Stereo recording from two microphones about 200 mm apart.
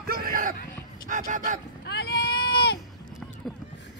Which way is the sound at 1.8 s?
55° left (ahead or behind).